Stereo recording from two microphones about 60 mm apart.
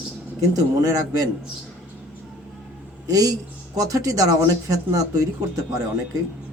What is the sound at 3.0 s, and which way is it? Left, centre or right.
Speech, right.